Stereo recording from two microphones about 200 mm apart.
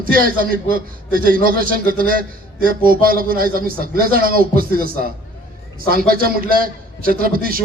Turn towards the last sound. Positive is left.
turn(degrees=-45)  # may be behind; listen again after turning